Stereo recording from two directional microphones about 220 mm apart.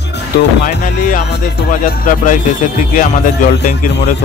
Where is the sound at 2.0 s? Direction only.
35° left (ahead or behind).